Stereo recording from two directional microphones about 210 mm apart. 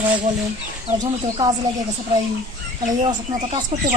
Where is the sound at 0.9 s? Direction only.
20° right (ahead or behind).